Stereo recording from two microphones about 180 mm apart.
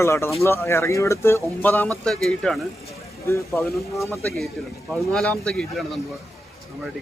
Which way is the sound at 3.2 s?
15° left (ahead or behind).